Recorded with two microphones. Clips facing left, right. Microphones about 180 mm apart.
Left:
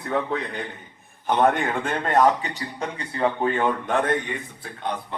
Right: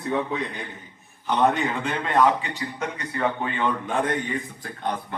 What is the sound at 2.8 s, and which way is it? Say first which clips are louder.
Speech: left 3 dB; 30° left (ahead or behind).